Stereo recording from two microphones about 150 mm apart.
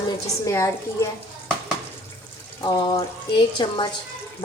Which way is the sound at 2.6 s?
30° left (ahead or behind).